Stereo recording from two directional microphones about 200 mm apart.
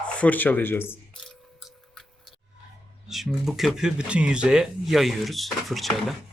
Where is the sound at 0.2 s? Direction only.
10° left (ahead or behind).